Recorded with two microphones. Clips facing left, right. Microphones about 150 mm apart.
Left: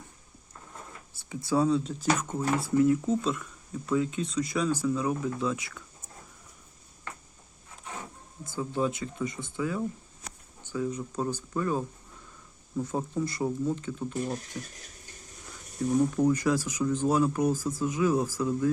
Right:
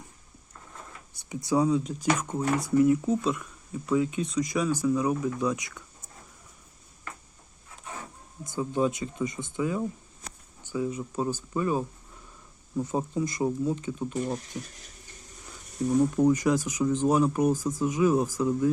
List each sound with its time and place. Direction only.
1.1 s speech: 15° right (ahead or behind)
8.4 s speech: 20° right (ahead or behind)
10.7 s speech: 10° right (ahead or behind)
16.2 s speech: 20° right (ahead or behind)